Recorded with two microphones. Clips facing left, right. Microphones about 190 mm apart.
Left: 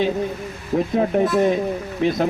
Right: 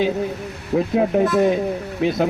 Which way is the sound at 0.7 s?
Centre (ahead or behind).